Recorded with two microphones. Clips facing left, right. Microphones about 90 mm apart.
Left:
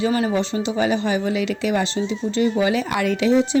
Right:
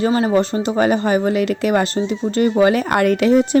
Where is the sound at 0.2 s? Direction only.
40° right (ahead or behind).